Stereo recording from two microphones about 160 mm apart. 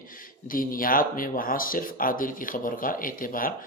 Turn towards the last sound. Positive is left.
turn(degrees=60)  # may be behind; listen again after turning